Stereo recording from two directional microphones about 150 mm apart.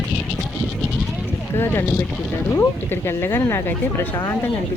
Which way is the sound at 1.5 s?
15° left (ahead or behind).